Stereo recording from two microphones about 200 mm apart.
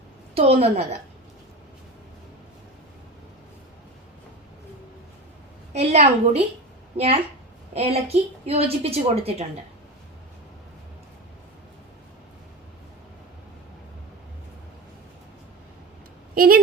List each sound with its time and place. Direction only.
0.3 s a woman's voice: 30° right (ahead or behind)
5.7 s a woman's voice: 35° right (ahead or behind)
16.3 s speech: 45° right (ahead or behind)